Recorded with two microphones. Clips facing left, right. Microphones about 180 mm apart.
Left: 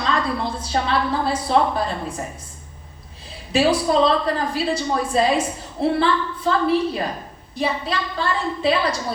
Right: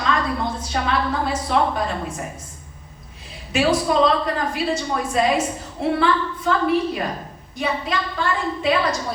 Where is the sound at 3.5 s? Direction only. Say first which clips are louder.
Left 1 dB; 30° left (ahead or behind).